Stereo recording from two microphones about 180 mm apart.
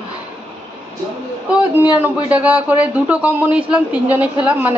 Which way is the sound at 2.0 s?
5° right (ahead or behind).